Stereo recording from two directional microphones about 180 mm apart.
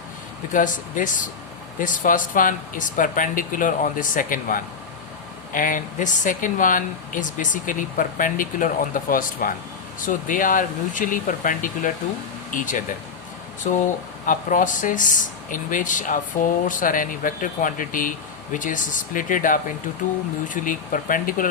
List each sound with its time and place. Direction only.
0.5 s speech: 45° left (ahead or behind)